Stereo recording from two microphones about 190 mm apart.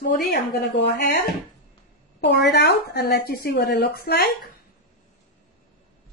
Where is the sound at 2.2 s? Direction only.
65° left (ahead or behind).